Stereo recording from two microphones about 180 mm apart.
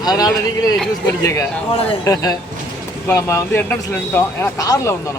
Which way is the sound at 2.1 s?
20° left (ahead or behind).